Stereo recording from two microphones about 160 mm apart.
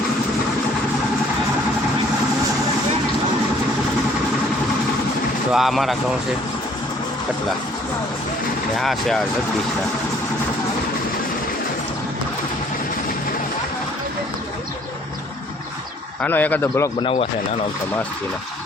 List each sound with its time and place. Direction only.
5.5 s speech: centre (ahead or behind)
8.8 s speech: centre (ahead or behind)
16.2 s speech: 10° left (ahead or behind)
17.0 s speech: 35° left (ahead or behind)